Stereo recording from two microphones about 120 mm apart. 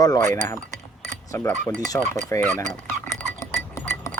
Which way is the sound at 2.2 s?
25° left (ahead or behind).